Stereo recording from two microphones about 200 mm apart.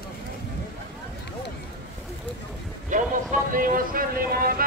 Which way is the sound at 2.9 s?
40° right (ahead or behind).